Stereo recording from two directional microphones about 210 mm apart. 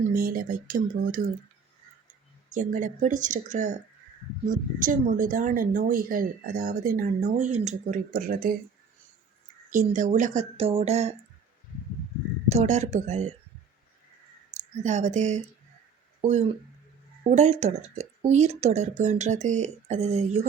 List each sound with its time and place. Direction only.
0.1 s speech: 45° right (ahead or behind)
2.5 s speech: 40° right (ahead or behind)
9.6 s speech: 40° right (ahead or behind)
12.5 s speech: 30° right (ahead or behind)
14.5 s speech: 35° right (ahead or behind)